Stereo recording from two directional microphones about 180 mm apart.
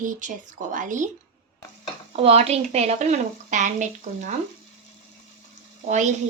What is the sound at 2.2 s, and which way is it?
Speech, 35° right (ahead or behind).